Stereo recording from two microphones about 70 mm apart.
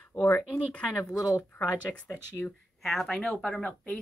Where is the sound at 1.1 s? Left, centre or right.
Centre.